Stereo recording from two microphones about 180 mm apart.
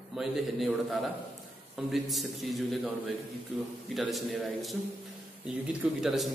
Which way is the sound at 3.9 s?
Centre (ahead or behind).